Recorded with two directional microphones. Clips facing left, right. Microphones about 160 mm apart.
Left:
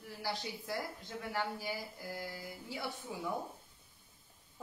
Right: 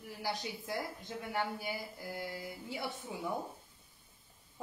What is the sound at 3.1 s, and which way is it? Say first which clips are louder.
Speech: even; 20° right (ahead or behind).